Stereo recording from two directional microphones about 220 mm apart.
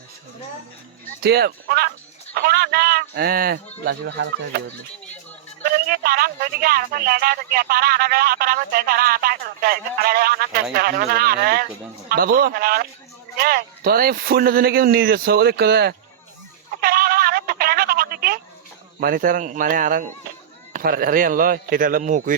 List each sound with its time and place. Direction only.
1.2 s speech: 45° right (ahead or behind)
5.6 s speech: 45° right (ahead or behind)
16.8 s a sound: 45° right (ahead or behind)
18.9 s speech: 40° right (ahead or behind)